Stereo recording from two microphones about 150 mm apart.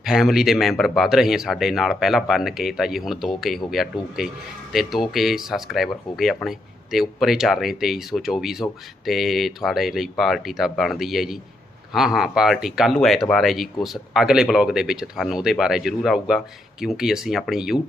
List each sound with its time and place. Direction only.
0.0 s speech: centre (ahead or behind)